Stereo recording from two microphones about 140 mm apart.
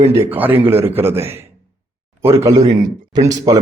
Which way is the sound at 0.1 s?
15° right (ahead or behind).